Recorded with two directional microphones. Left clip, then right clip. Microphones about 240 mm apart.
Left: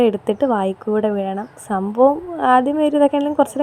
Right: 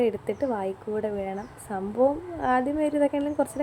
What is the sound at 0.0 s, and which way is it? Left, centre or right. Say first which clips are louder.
A woman's voice: left 9 dB; left.